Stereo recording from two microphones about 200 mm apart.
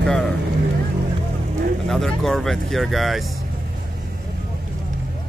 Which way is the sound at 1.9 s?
Centre (ahead or behind).